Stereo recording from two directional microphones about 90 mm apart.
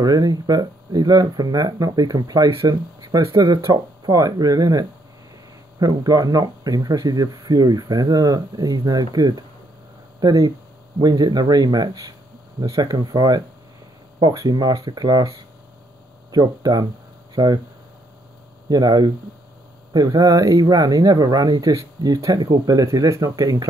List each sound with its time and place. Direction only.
0.0 s speech: 45° right (ahead or behind)
18.7 s speech: 50° right (ahead or behind)